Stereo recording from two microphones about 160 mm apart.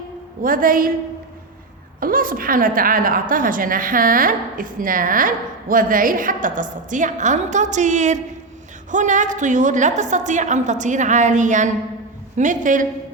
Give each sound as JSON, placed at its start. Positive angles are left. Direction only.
{"t": 0.4, "sound": "a woman's voice", "side_deg": -60}
{"t": 2.0, "sound": "a woman's voice", "side_deg": -60}